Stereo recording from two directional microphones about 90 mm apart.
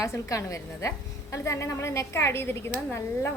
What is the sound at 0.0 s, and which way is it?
A woman's voice, 35° left (ahead or behind).